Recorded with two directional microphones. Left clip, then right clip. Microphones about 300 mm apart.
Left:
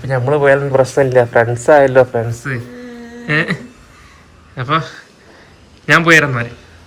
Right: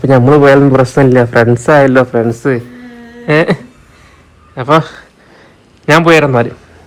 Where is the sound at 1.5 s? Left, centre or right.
Right.